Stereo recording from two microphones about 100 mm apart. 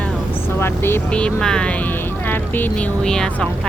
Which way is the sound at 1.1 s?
10° left (ahead or behind).